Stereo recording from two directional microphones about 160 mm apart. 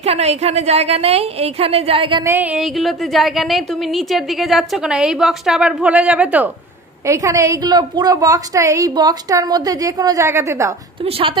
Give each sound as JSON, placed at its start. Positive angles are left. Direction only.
{"t": 0.0, "sound": "a woman's voice", "side_deg": -40}
{"t": 2.2, "sound": "a woman's voice", "side_deg": -10}
{"t": 7.1, "sound": "a woman's voice", "side_deg": -20}
{"t": 11.1, "sound": "a woman's voice", "side_deg": -35}